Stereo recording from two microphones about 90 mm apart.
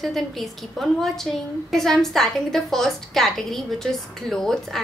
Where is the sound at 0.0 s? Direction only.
Centre (ahead or behind).